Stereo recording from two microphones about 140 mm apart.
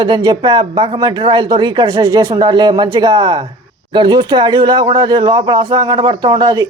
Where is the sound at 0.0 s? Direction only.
30° right (ahead or behind).